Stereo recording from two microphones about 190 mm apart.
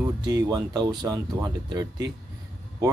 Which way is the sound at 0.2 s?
20° right (ahead or behind).